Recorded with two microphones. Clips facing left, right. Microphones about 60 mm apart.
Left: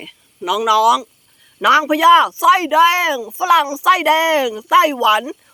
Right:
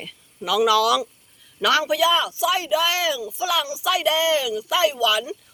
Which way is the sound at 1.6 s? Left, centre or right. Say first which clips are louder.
Left 7 dB; left.